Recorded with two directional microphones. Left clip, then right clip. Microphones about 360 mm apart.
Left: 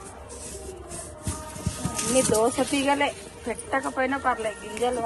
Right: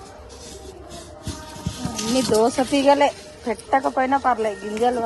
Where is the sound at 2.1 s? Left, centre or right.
Right.